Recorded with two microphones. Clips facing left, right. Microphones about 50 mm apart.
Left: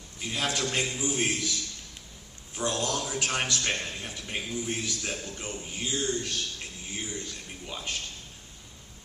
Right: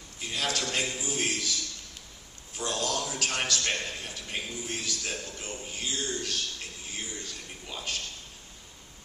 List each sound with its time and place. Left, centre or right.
0.2 s a man's voice: centre
0.9 s a man's voice: left
1.1 s a man's voice: centre
2.6 s a man's voice: centre
5.1 s a man's voice: left
5.5 s a man's voice: centre